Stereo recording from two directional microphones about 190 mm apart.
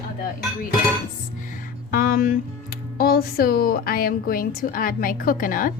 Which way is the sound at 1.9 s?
50° left (ahead or behind).